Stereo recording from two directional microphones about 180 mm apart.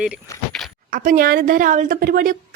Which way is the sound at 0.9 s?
50° right (ahead or behind).